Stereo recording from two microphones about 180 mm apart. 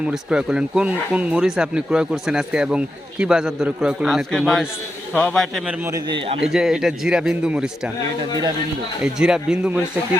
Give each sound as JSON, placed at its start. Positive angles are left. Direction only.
{"t": 0.0, "sound": "speech", "side_deg": -5}
{"t": 5.8, "sound": "speech", "side_deg": -20}
{"t": 6.4, "sound": "speech", "side_deg": -5}
{"t": 9.0, "sound": "speech", "side_deg": -5}